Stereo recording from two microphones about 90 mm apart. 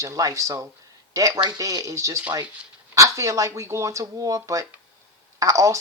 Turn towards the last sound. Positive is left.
turn(degrees=-35)  # may be behind; listen again after turning